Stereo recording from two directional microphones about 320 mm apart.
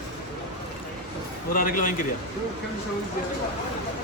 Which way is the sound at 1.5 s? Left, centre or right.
Left.